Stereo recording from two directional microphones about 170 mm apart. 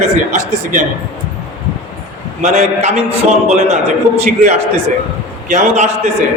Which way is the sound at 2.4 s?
45° right (ahead or behind).